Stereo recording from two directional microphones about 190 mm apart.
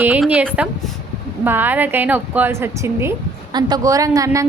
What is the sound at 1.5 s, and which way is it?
A woman's voice, 10° right (ahead or behind).